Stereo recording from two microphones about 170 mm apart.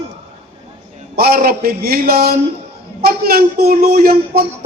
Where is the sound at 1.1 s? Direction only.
60° right (ahead or behind).